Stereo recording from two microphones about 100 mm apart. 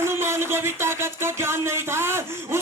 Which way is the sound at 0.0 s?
25° right (ahead or behind).